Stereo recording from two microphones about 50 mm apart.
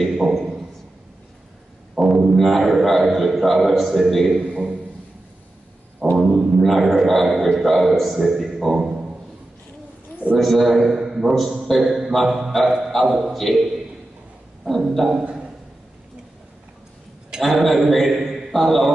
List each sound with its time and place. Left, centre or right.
0.0 s a sound: centre
2.0 s music: centre
2.3 s a man's voice: centre
4.4 s a man's voice: right
6.1 s a sound: centre
6.6 s a man's voice: centre
10.3 s a man's voice: centre
15.0 s a man's voice: centre
17.4 s a man's voice: centre